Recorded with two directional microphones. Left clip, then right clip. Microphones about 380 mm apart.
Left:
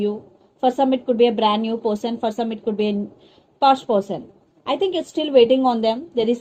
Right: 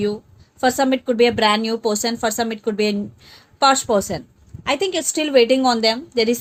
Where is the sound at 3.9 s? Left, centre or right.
Right.